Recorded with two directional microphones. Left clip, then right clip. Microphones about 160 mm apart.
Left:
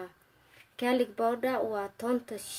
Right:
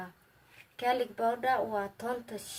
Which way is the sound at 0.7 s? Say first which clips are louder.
Left 1 dB; 55° left (ahead or behind).